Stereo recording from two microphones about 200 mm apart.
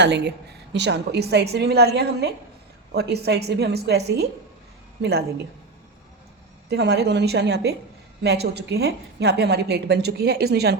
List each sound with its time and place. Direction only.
0.0 s a woman's voice: 60° right (ahead or behind)
6.7 s a woman's voice: 55° right (ahead or behind)